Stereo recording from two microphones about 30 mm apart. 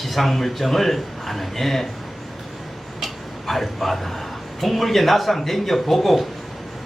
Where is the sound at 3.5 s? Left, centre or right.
Centre.